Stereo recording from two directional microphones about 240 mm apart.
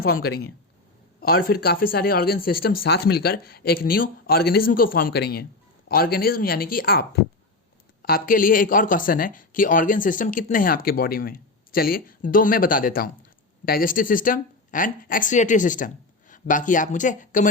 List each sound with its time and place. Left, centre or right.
0.0 s speech: left